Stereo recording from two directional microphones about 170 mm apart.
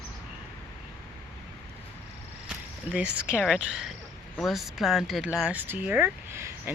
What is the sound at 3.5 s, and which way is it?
Speech, 5° right (ahead or behind).